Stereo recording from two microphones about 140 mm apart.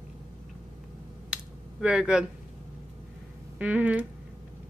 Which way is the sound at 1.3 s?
5° right (ahead or behind).